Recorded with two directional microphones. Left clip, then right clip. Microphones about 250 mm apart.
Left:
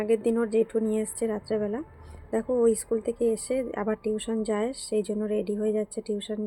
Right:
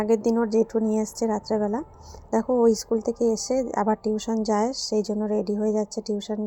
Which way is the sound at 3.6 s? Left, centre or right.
Centre.